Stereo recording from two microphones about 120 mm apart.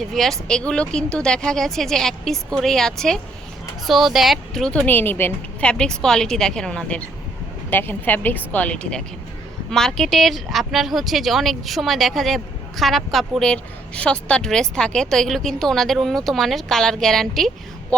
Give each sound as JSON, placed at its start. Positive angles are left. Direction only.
{"t": 0.0, "sound": "speech", "side_deg": 0}
{"t": 4.9, "sound": "a woman's voice", "side_deg": 15}